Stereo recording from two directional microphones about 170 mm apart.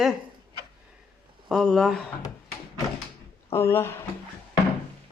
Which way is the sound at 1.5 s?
Centre (ahead or behind).